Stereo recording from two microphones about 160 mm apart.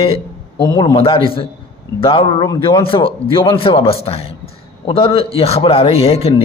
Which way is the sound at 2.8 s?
35° left (ahead or behind).